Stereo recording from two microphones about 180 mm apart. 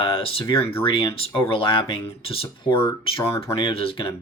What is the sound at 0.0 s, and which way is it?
Speech, 30° left (ahead or behind).